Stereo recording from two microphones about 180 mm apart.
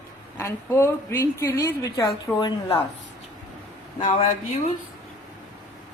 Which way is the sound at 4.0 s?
35° left (ahead or behind).